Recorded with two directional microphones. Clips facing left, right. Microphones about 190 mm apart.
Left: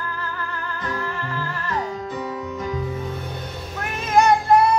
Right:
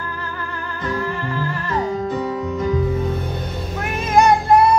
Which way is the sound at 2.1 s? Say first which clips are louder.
Right 6 dB; 35° right (ahead or behind).